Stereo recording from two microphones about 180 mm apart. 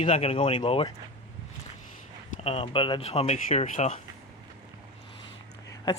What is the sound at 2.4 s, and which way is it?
Speech, 30° left (ahead or behind).